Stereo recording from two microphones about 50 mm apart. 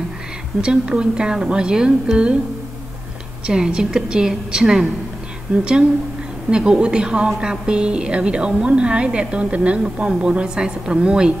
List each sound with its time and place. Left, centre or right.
0.6 s a woman's voice: centre
3.4 s a woman's voice: centre